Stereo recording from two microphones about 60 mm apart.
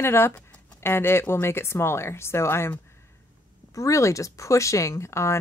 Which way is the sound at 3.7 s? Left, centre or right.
Left.